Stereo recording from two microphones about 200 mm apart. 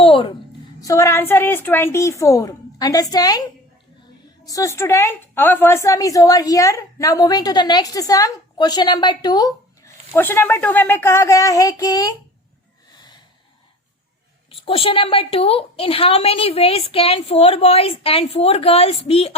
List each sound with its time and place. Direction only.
0.0 s a sound: 25° left (ahead or behind)
0.8 s a woman's voice: 15° left (ahead or behind)
4.4 s a woman's voice: 15° left (ahead or behind)
14.5 s a woman's voice: 25° left (ahead or behind)